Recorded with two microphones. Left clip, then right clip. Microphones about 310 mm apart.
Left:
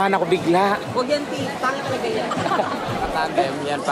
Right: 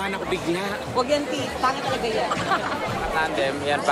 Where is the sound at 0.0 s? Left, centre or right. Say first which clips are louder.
Left 7 dB; centre.